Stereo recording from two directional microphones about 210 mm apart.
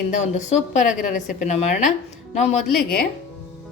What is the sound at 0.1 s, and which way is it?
A woman's voice, 35° left (ahead or behind).